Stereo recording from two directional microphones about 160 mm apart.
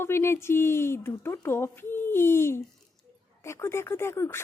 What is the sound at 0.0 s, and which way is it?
A woman's voice, 15° left (ahead or behind).